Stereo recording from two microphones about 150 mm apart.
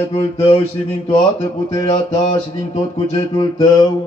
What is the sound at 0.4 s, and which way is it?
Speech, 45° left (ahead or behind).